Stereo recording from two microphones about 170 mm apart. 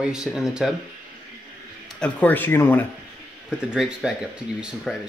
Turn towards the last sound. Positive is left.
turn(degrees=-5)  # may be behind; listen again after turning